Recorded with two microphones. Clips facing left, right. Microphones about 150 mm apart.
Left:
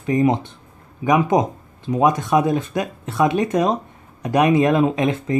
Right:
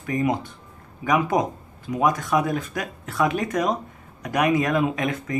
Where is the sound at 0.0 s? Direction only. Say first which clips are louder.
Left 6 dB; 25° left (ahead or behind).